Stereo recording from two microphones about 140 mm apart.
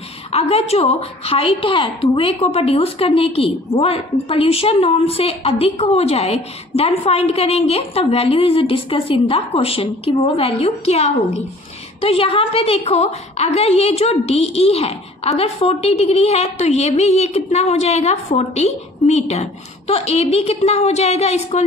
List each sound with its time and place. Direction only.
0.3 s a woman's voice: 45° left (ahead or behind)